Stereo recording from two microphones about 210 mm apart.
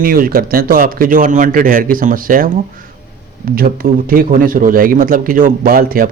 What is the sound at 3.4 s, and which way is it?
A man's voice, 45° right (ahead or behind).